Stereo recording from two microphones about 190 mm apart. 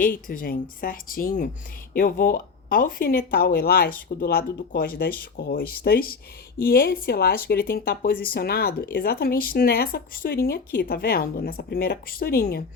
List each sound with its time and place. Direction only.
0.0 s speech: 45° left (ahead or behind)